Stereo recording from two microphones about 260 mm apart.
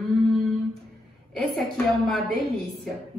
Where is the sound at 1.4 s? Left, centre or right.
Centre.